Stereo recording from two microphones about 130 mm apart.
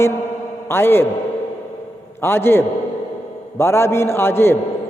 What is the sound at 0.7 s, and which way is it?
Speech, 20° left (ahead or behind).